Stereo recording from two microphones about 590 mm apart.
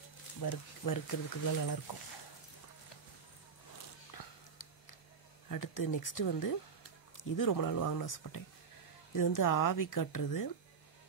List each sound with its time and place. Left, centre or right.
0.4 s speech: left
5.5 s speech: left